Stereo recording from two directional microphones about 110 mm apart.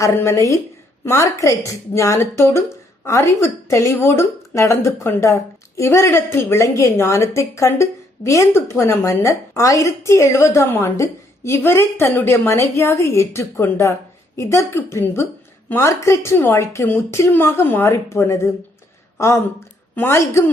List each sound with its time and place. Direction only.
0.0 s a woman's voice: 25° left (ahead or behind)